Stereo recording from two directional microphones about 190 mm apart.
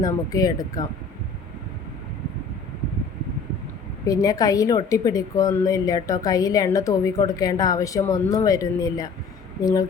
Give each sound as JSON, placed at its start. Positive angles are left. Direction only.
{"t": 0.0, "sound": "speech", "side_deg": 20}
{"t": 4.0, "sound": "a woman's voice", "side_deg": 20}